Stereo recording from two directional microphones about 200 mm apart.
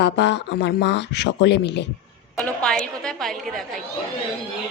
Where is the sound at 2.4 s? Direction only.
5° left (ahead or behind).